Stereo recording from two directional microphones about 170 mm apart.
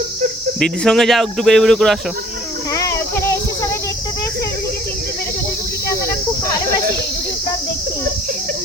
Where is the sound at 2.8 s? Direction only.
15° left (ahead or behind).